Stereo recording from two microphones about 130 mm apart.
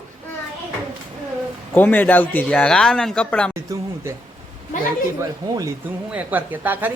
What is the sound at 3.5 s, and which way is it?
Speech, 20° right (ahead or behind).